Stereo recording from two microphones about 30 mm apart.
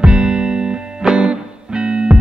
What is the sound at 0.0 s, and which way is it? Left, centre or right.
Music, right.